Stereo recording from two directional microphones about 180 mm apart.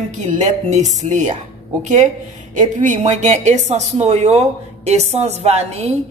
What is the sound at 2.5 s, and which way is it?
Speech, 45° right (ahead or behind).